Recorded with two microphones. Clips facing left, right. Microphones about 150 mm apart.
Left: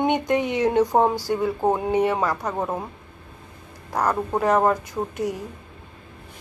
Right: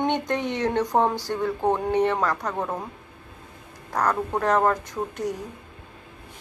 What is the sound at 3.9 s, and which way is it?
Speech, 10° left (ahead or behind).